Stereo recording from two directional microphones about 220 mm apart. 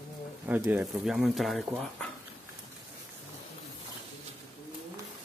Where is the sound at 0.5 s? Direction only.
10° right (ahead or behind).